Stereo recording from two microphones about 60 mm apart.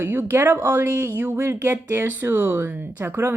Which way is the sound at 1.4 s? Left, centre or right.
Right.